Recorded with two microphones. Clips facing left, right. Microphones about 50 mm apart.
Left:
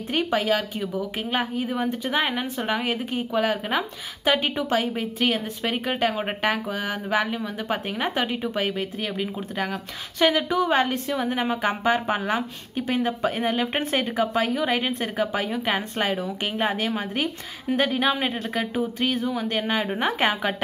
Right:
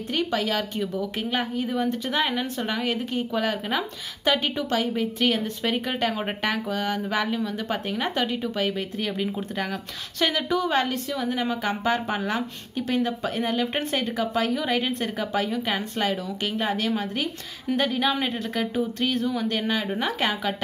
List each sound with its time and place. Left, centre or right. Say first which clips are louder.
0.1 s a woman's voice: left 3 dB; left
11.1 s a woman's voice: left 2 dB; left